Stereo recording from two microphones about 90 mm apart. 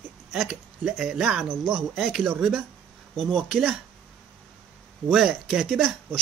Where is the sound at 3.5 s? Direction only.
5° right (ahead or behind).